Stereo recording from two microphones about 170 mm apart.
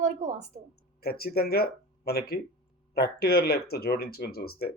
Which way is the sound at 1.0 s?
65° left (ahead or behind).